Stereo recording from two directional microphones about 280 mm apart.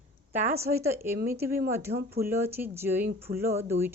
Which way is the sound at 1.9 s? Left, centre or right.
Right.